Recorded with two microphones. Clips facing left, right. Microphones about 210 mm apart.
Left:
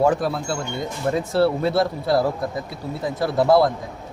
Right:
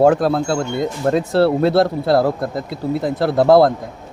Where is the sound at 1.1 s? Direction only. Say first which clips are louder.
Right 4 dB; 75° right (ahead or behind).